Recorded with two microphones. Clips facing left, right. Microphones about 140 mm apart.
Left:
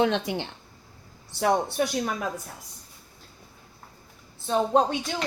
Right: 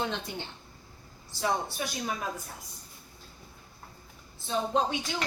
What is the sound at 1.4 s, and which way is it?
Speech, 65° left (ahead or behind).